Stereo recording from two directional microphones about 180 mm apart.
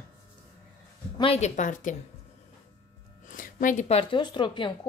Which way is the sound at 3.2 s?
45° left (ahead or behind).